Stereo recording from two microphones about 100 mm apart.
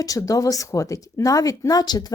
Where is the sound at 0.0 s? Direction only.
35° left (ahead or behind).